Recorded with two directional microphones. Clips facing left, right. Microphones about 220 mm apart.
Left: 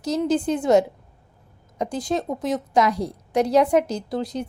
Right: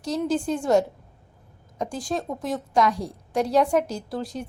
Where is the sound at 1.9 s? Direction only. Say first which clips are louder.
Left 4 dB; 20° left (ahead or behind).